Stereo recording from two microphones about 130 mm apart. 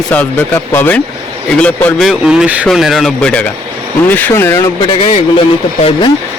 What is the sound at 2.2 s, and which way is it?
Speech, 5° right (ahead or behind).